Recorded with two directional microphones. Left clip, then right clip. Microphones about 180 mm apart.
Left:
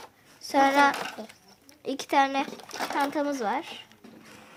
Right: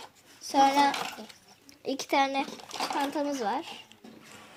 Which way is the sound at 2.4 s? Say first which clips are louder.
Left 2 dB; 5° left (ahead or behind).